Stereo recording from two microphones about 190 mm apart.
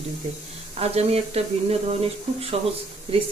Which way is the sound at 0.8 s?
35° right (ahead or behind).